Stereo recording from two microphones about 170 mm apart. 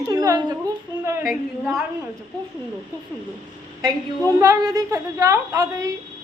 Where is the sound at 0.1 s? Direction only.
20° right (ahead or behind).